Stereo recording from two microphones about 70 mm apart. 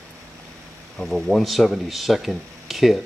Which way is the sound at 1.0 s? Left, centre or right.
Centre.